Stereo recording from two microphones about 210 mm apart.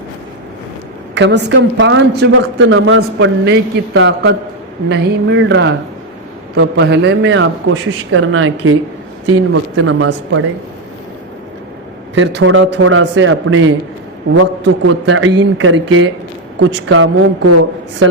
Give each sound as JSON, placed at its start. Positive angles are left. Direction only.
{"t": 1.1, "sound": "a woman's voice", "side_deg": -55}
{"t": 12.1, "sound": "a man's voice", "side_deg": -60}